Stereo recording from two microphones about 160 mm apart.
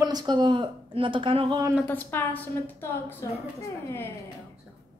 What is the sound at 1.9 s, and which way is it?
A woman's voice, 10° left (ahead or behind).